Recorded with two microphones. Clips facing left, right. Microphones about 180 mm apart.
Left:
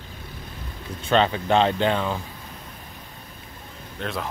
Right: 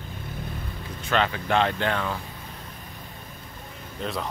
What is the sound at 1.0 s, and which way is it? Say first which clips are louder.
Speech: left 5 dB; 30° left (ahead or behind).